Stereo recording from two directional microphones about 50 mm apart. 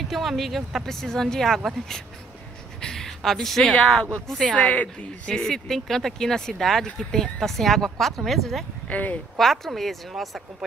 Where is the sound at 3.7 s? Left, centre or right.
Centre.